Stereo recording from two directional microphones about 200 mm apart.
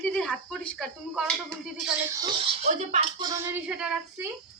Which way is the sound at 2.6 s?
35° right (ahead or behind).